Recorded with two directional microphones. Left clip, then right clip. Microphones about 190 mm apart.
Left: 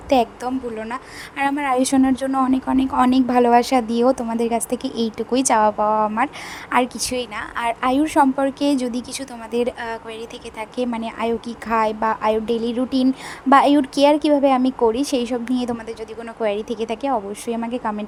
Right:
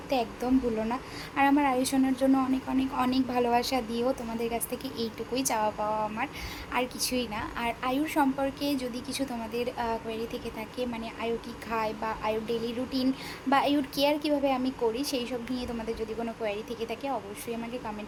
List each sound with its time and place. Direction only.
0.1 s a woman's voice: 40° left (ahead or behind)